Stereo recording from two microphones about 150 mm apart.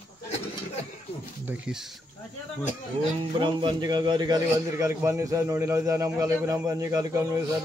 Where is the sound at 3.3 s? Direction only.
35° right (ahead or behind).